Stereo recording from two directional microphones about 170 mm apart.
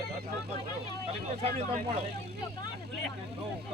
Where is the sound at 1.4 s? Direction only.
35° right (ahead or behind).